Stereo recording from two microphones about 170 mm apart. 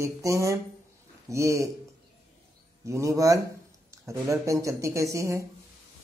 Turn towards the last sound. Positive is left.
turn(degrees=-20)  # may be behind; listen again after turning